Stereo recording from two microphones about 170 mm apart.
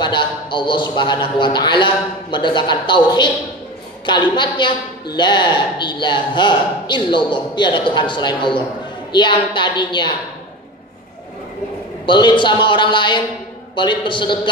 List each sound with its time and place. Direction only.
0.0 s a man's voice: 25° left (ahead or behind)
12.1 s a man's voice: 25° left (ahead or behind)